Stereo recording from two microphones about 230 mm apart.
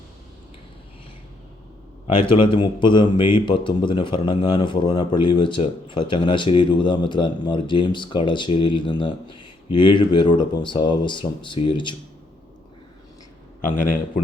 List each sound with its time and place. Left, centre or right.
2.1 s a man's voice: left
13.7 s a man's voice: left